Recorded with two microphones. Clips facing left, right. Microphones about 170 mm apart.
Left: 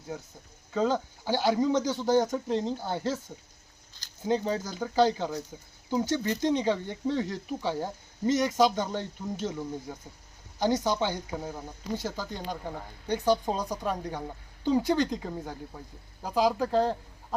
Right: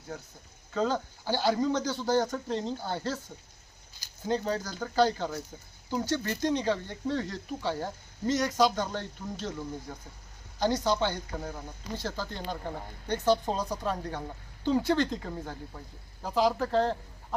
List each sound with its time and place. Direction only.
0.7 s speech: 15° left (ahead or behind)
4.3 s speech: 15° left (ahead or behind)